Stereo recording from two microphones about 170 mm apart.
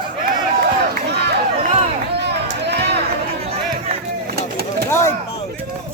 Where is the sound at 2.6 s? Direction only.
80° right.